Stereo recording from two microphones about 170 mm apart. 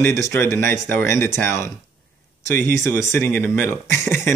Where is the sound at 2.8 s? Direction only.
15° left (ahead or behind).